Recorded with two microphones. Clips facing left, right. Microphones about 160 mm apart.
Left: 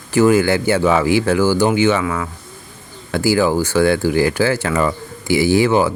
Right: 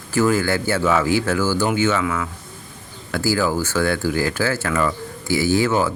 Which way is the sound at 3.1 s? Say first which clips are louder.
Left 5 dB; 15° left (ahead or behind).